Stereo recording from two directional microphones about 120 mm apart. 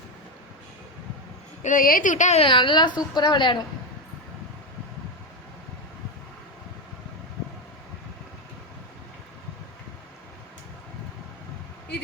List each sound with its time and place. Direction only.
1.6 s speech: 90° left
2.4 s a woman's voice: 45° left (ahead or behind)